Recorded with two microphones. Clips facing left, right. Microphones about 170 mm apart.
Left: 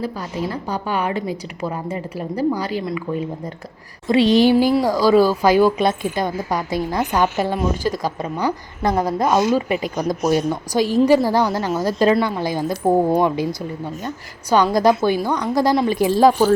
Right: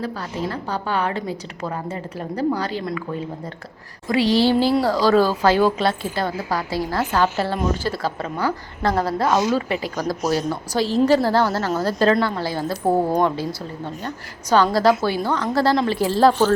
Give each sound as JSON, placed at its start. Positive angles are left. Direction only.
{"t": 0.0, "sound": "a woman's voice", "side_deg": 10}
{"t": 4.1, "sound": "a woman's voice", "side_deg": 20}